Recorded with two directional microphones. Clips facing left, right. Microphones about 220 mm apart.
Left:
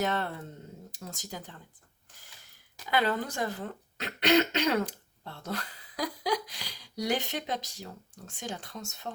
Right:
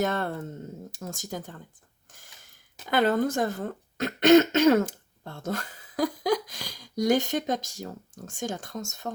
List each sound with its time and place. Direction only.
0.0 s speech: 45° right (ahead or behind)
2.9 s speech: 45° right (ahead or behind)